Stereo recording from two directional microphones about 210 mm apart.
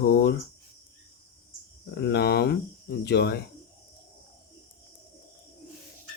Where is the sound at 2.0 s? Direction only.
50° left (ahead or behind).